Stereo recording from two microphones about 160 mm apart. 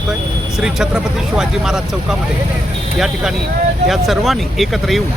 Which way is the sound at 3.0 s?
5° right (ahead or behind).